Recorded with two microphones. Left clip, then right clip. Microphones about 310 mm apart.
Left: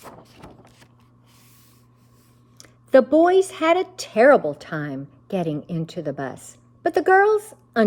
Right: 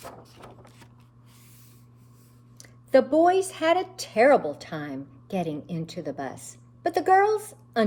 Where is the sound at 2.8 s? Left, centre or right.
Left.